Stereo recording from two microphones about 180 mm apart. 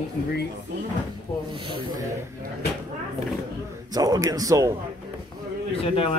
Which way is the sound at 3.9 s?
20° right (ahead or behind).